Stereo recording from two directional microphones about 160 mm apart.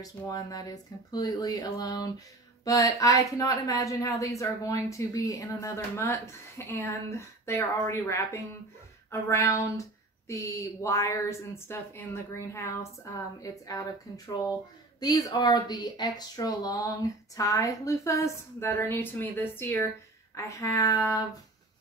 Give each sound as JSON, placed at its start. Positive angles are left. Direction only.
{"t": 0.0, "sound": "speech", "side_deg": 25}